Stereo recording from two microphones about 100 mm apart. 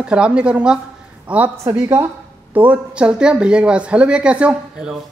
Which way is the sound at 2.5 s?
15° right (ahead or behind).